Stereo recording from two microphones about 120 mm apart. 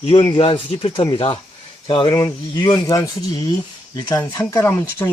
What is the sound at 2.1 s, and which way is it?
Speech, 35° left (ahead or behind).